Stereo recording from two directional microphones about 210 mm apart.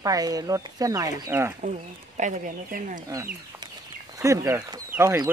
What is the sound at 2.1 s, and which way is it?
Speech, 35° right (ahead or behind).